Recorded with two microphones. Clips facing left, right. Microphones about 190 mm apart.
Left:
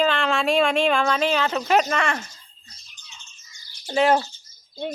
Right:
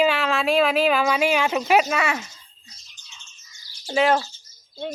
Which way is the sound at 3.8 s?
Centre (ahead or behind).